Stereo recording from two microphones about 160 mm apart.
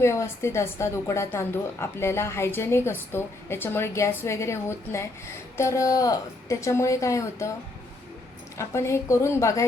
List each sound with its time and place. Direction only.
0.0 s a woman's voice: 15° left (ahead or behind)
8.5 s a woman's voice: 15° left (ahead or behind)